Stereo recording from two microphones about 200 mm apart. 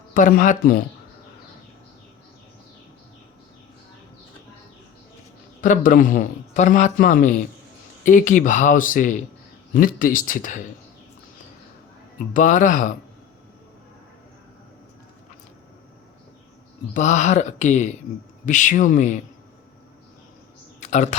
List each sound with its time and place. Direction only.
0.1 s speech: 45° left (ahead or behind)
5.6 s a man's voice: 40° left (ahead or behind)
12.3 s a man's voice: 40° left (ahead or behind)
16.9 s a man's voice: 40° left (ahead or behind)
20.8 s speech: 35° left (ahead or behind)